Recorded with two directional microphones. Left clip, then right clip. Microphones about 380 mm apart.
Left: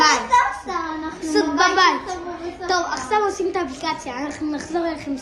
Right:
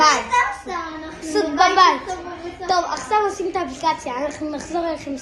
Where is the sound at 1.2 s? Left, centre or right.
Centre.